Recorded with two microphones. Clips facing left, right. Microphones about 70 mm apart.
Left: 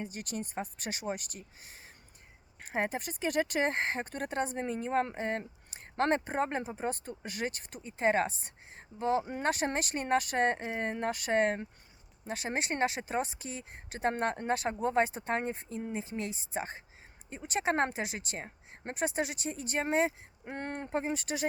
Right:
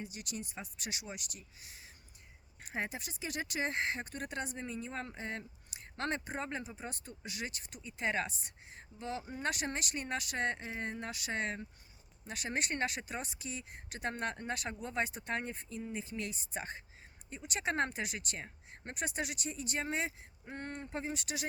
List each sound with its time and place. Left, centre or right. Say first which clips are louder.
0.0 s speech: left 5 dB; left
12.3 s speech: left 4 dB; left
20.4 s speech: left 5 dB; left